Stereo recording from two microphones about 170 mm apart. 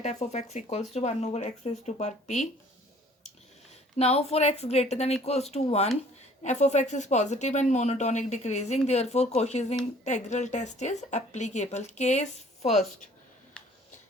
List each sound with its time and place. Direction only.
0.0 s speech: 40° left (ahead or behind)
3.9 s speech: 35° left (ahead or behind)